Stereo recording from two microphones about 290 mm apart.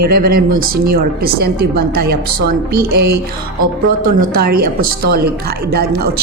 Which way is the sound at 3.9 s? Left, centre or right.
Right.